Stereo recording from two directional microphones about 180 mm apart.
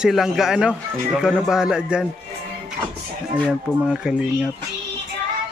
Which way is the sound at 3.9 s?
5° right (ahead or behind).